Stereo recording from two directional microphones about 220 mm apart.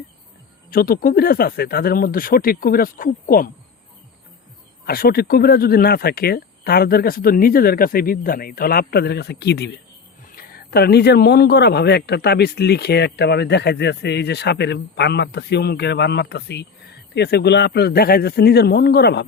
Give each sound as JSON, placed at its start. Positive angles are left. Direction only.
{"t": 0.7, "sound": "speech", "side_deg": 40}
{"t": 4.9, "sound": "speech", "side_deg": 45}